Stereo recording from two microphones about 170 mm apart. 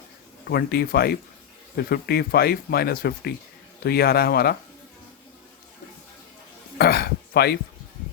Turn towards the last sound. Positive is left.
turn(degrees=65)  # may be behind; listen again after turning